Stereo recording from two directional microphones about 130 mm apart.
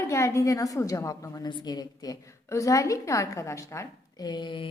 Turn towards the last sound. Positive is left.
turn(degrees=40)  # may be behind; listen again after turning